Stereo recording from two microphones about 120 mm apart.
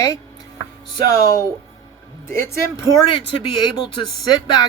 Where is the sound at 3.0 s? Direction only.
40° left (ahead or behind).